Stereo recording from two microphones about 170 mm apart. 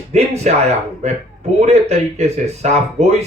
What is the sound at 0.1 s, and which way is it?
Speech, 40° right (ahead or behind).